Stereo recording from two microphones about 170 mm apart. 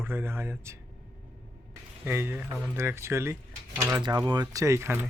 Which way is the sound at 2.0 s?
15° right (ahead or behind).